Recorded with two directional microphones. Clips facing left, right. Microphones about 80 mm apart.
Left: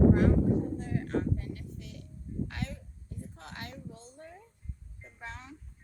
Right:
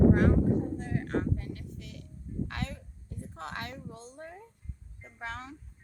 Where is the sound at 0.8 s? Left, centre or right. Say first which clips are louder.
Even; right.